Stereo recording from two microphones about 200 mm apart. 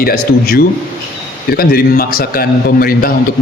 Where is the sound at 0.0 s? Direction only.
50° left (ahead or behind).